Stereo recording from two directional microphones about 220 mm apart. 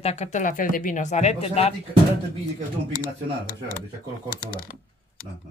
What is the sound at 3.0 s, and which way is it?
Speech, 40° left (ahead or behind).